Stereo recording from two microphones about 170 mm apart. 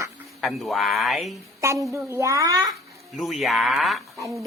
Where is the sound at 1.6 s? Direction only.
15° right (ahead or behind).